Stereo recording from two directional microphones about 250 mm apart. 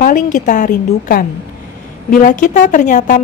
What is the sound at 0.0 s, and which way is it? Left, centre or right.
A woman's voice, left.